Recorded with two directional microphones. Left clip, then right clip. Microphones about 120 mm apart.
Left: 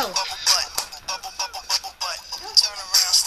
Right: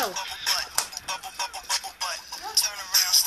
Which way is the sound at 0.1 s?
40° left (ahead or behind).